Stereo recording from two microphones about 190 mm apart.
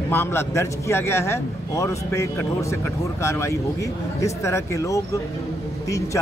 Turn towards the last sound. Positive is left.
turn(degrees=15)  # may be behind; listen again after turning